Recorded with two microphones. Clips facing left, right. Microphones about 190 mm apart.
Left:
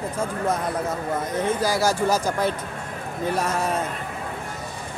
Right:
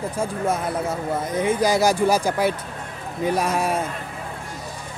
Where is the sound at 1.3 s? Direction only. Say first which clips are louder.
Right 4 dB; 15° right (ahead or behind).